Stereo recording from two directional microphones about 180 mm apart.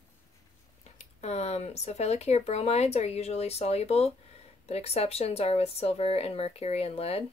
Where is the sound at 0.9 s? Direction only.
35° left (ahead or behind).